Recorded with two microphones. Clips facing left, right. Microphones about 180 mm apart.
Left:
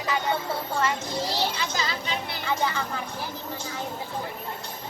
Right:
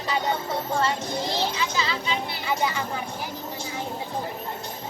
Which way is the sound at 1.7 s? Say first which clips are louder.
Right 2 dB; 45° left (ahead or behind).